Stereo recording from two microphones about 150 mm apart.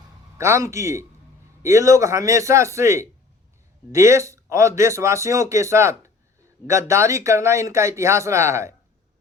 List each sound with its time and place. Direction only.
0.3 s speech: 20° right (ahead or behind)